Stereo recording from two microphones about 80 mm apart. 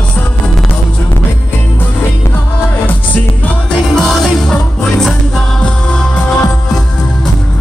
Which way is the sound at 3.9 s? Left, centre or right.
Centre.